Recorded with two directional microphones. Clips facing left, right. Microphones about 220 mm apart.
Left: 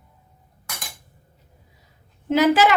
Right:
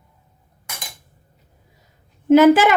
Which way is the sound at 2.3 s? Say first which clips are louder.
Right 6 dB; 50° right (ahead or behind).